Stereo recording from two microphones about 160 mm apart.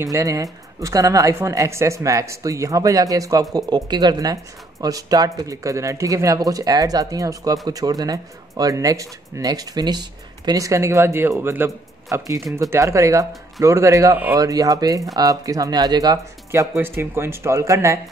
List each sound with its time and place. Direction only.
0.0 s speech: 20° right (ahead or behind)